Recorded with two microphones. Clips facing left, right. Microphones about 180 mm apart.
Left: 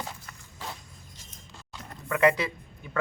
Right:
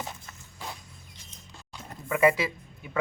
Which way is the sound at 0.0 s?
20° right (ahead or behind).